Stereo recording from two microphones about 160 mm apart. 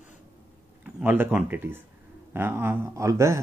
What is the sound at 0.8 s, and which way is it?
Speech, 10° right (ahead or behind).